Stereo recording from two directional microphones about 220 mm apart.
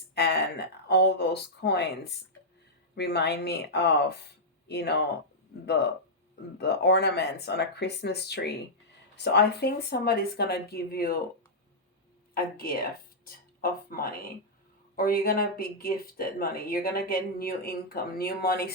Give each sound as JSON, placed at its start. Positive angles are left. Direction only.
{"t": 0.1, "sound": "speech", "side_deg": 50}
{"t": 12.3, "sound": "speech", "side_deg": 40}